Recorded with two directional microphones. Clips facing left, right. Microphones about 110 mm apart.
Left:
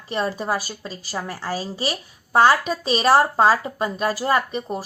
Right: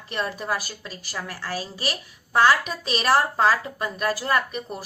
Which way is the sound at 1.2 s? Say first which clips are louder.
Left 3 dB; 15° left (ahead or behind).